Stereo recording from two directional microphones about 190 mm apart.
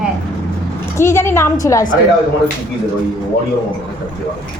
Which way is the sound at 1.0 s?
15° left (ahead or behind).